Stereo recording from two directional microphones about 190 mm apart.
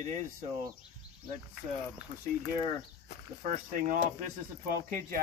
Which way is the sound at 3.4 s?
45° right (ahead or behind).